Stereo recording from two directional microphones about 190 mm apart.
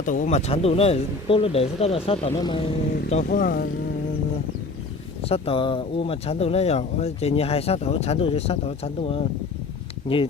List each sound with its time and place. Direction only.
0.0 s speech: 40° left (ahead or behind)
3.2 s speech: 50° left (ahead or behind)
5.2 s speech: 30° left (ahead or behind)